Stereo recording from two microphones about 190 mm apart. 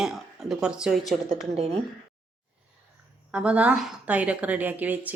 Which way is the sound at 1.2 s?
35° right (ahead or behind).